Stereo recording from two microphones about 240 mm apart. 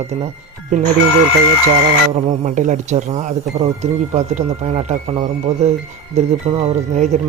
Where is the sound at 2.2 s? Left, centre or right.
Right.